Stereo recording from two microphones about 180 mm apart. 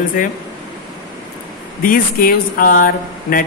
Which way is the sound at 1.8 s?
55° left (ahead or behind).